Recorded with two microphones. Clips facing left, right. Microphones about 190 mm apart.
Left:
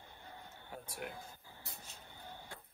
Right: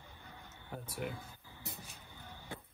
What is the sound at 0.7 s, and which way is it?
Speech, centre (ahead or behind).